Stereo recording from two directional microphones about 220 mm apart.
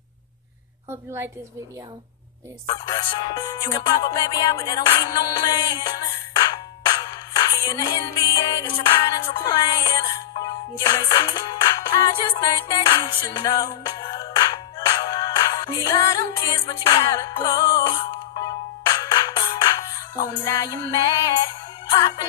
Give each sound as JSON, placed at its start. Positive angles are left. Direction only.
{"t": 0.8, "sound": "a woman's voice", "side_deg": -10}
{"t": 2.6, "sound": "music", "side_deg": 20}